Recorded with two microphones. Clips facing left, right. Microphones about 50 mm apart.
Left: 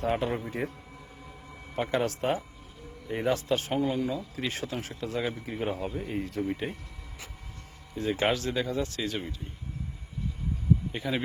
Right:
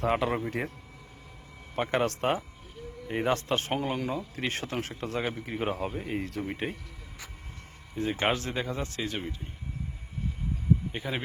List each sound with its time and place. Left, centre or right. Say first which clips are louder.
0.0 s a man's voice: right 1 dB; right
1.7 s speech: right 1 dB; right
8.0 s speech: left 1 dB; right
10.9 s speech: left 2 dB; centre